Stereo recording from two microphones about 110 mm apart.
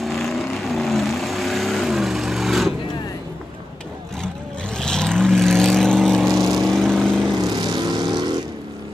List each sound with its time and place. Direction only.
0.0 s vehicle: centre (ahead or behind)
4.7 s vehicle: 5° left (ahead or behind)
7.4 s vehicle: 40° right (ahead or behind)